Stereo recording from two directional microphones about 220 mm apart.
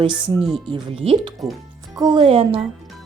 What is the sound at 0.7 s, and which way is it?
Speech, 25° right (ahead or behind).